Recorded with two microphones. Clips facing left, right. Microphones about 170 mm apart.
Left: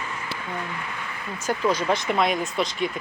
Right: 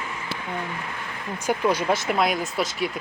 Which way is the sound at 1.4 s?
10° right (ahead or behind).